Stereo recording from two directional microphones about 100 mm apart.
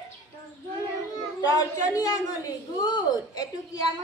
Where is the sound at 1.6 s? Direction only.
35° left (ahead or behind).